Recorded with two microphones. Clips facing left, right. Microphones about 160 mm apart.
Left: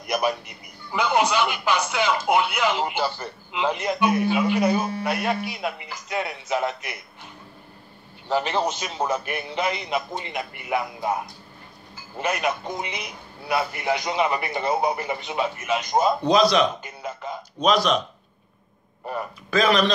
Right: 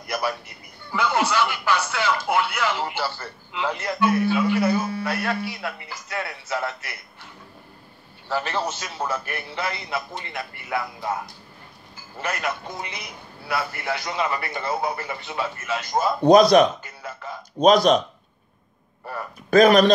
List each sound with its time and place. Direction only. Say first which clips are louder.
0.0 s a man's voice: left 3 dB; 20° left (ahead or behind)
8.3 s a man's voice: left 3 dB; 20° left (ahead or behind)
16.2 s speech: right 9 dB; 50° right (ahead or behind)
16.8 s music: left 3 dB; 20° left (ahead or behind)
17.6 s speech: right 5 dB; 45° right (ahead or behind)
19.1 s a man's voice: left 3 dB; 15° left (ahead or behind)
19.5 s speech: right 6 dB; 50° right (ahead or behind)